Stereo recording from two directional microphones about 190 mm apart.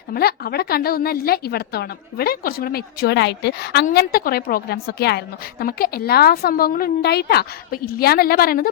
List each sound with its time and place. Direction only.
0.1 s a woman's voice: 55° left (ahead or behind)